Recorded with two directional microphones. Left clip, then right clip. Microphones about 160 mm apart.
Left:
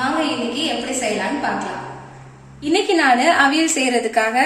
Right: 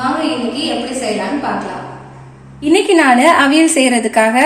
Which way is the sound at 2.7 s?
40° right (ahead or behind).